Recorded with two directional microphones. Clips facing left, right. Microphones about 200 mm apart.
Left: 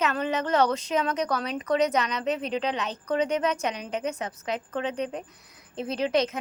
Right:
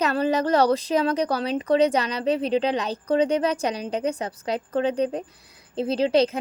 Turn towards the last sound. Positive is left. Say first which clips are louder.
# right 5 dB
turn(degrees=-30)  # may be behind; listen again after turning